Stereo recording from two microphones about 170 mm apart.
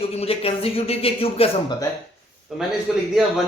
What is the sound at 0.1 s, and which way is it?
Speech, 35° left (ahead or behind).